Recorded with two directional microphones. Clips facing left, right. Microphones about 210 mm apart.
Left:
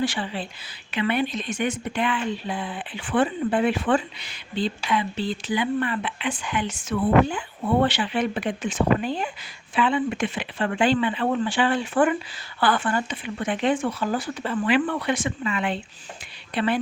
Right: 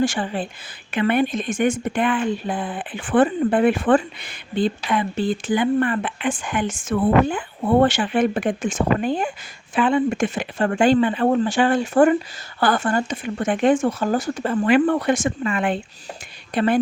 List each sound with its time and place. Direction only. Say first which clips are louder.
0.0 s speech: right 5 dB; 45° right (ahead or behind)